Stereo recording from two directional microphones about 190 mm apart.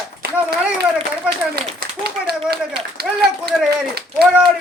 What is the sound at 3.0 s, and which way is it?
Speech, 55° right (ahead or behind).